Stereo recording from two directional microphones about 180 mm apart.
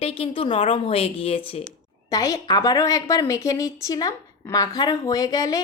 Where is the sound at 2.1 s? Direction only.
20° left (ahead or behind).